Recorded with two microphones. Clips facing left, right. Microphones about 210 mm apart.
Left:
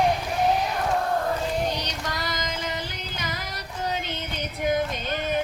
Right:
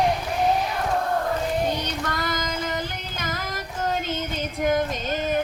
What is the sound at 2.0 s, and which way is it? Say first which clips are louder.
Female singing: right 3 dB; 50° right (ahead or behind).